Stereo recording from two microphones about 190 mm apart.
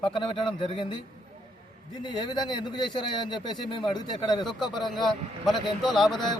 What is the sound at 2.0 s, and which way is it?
Speech, 25° left (ahead or behind).